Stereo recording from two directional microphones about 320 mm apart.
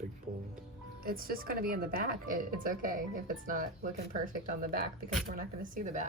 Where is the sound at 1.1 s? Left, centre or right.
Right.